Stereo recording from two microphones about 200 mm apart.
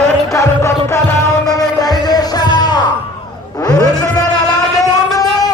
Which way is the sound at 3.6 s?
20° left (ahead or behind).